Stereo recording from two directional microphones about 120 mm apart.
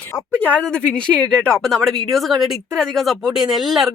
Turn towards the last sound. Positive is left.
turn(degrees=0)  # may be behind; listen again after turning